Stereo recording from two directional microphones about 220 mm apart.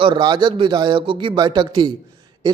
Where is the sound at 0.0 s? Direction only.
20° right (ahead or behind).